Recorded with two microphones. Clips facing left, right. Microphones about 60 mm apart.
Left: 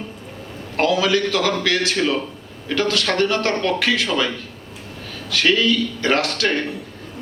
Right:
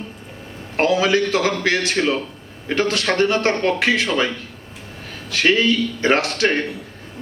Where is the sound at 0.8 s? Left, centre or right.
Right.